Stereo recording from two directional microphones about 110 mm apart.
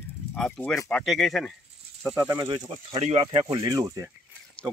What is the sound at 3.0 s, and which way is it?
Speech, 70° right (ahead or behind).